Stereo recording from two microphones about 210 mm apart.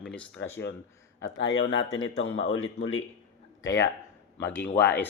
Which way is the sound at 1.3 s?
65° left (ahead or behind).